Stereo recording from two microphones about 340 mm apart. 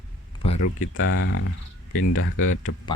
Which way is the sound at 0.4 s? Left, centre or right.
Centre.